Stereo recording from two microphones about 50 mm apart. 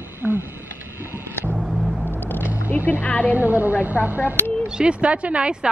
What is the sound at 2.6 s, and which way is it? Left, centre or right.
Speech, left.